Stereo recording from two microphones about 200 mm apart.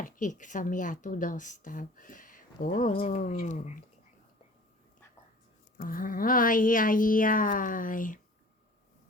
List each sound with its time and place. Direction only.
0.0 s a woman's voice: 40° left (ahead or behind)
5.7 s speech: 45° left (ahead or behind)